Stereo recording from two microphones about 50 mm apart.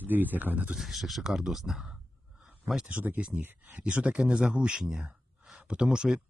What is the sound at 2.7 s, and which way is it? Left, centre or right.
Speech, right.